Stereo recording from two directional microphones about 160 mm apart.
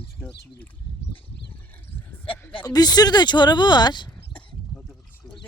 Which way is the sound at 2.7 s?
25° left (ahead or behind).